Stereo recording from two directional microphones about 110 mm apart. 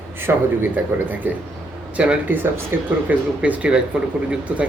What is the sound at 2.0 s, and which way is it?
A man's voice, 15° right (ahead or behind).